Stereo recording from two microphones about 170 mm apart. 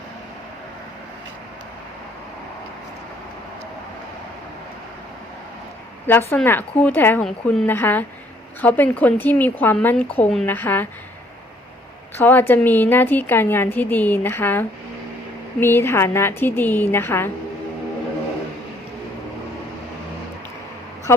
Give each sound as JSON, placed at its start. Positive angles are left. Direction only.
{"t": 6.1, "sound": "a woman's voice", "side_deg": 10}
{"t": 12.1, "sound": "a woman's voice", "side_deg": 10}
{"t": 21.1, "sound": "a woman's voice", "side_deg": 15}